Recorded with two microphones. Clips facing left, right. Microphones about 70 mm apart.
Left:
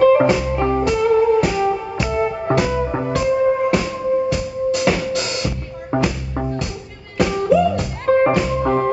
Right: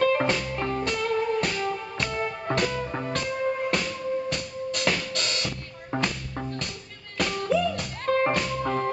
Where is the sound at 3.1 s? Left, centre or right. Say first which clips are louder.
Left 14 dB; centre.